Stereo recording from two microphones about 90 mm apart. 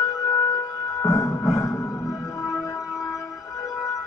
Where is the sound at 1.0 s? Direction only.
35° left (ahead or behind).